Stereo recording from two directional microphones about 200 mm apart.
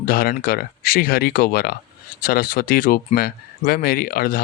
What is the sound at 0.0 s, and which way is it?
Speech, 45° left (ahead or behind).